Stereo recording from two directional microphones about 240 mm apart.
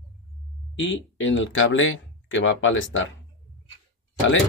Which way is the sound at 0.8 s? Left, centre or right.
Left.